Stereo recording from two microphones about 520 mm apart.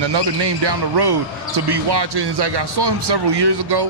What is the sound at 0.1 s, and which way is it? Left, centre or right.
Speech, right.